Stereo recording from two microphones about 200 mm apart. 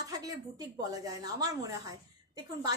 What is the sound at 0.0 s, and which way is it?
A woman's voice, 15° right (ahead or behind).